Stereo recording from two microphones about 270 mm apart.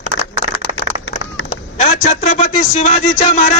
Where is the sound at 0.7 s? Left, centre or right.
Left.